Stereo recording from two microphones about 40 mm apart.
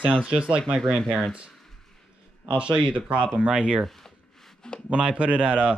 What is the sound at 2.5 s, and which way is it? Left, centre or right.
Speech, right.